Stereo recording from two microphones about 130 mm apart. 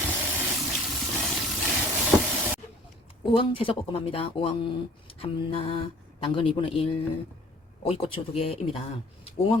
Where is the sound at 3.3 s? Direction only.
40° left (ahead or behind).